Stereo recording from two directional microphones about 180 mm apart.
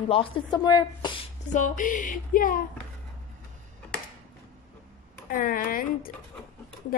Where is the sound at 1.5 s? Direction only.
45° left (ahead or behind).